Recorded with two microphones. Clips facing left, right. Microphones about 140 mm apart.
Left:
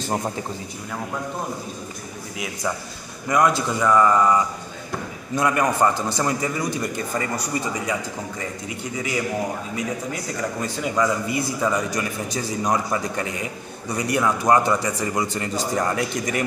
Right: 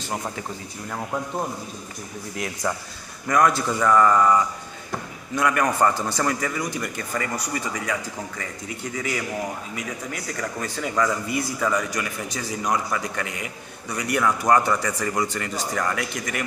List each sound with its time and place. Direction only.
2.3 s a man's voice: 5° left (ahead or behind)
3.3 s a man's voice: 20° left (ahead or behind)
5.3 s speech: 25° left (ahead or behind)